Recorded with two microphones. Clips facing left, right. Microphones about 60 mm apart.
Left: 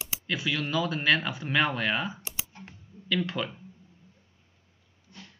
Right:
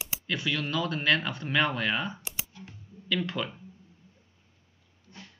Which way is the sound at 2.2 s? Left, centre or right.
Left.